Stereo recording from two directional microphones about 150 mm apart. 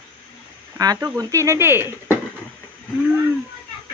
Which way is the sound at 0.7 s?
25° right (ahead or behind).